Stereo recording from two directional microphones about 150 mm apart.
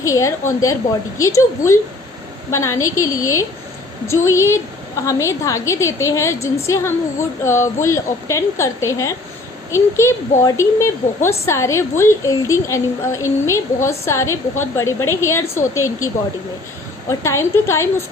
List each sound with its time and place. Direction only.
0.0 s a woman's voice: 20° left (ahead or behind)
17.1 s a woman's voice: 20° left (ahead or behind)